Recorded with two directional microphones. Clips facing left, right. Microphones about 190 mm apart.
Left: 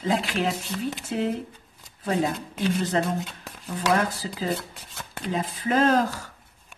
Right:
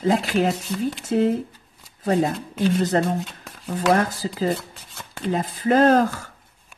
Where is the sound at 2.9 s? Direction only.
45° right (ahead or behind).